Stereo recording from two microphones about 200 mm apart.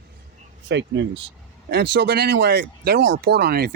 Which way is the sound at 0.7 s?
65° right (ahead or behind).